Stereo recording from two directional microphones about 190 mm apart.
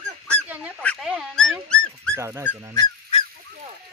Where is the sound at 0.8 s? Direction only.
5° left (ahead or behind).